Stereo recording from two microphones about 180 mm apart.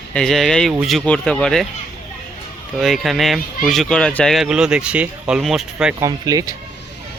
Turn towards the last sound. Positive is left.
turn(degrees=-20)  # may be behind; listen again after turning